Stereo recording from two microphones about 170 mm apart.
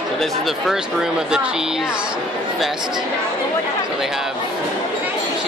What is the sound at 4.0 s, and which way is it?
Speech, 5° right (ahead or behind).